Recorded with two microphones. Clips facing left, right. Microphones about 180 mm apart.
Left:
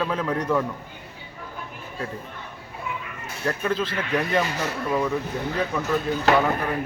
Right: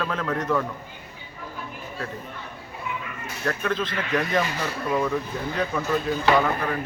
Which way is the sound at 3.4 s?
5° left (ahead or behind).